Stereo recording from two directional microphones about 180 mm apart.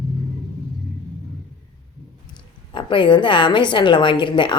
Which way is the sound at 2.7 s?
25° left (ahead or behind).